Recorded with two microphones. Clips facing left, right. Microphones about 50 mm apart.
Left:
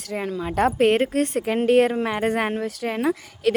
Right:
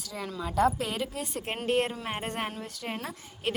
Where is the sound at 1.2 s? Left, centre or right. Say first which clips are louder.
Left 13 dB; left.